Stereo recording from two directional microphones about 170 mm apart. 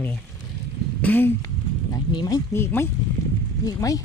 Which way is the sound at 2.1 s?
25° left (ahead or behind).